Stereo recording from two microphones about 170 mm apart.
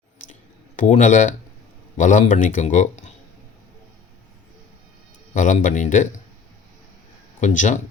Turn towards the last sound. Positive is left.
turn(degrees=50)  # may be behind; listen again after turning